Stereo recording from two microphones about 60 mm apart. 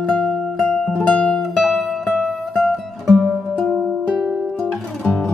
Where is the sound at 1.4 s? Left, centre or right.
Centre.